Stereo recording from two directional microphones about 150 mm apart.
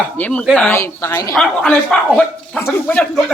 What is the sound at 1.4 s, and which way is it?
A woman's voice, 5° left (ahead or behind).